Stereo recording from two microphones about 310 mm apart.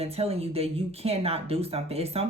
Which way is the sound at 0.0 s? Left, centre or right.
Centre.